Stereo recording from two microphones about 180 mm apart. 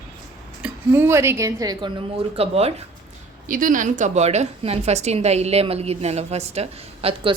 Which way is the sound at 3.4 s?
50° right (ahead or behind).